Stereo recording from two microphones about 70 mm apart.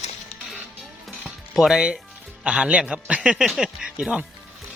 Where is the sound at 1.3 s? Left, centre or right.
Centre.